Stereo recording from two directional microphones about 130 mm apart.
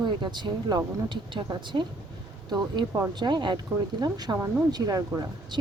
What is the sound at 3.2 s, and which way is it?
Speech, 35° right (ahead or behind).